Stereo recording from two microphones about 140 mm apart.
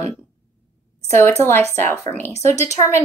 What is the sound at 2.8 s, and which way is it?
Speech, 30° left (ahead or behind).